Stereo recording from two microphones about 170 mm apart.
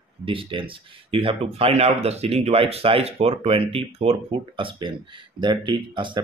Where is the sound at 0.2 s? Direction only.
30° right (ahead or behind).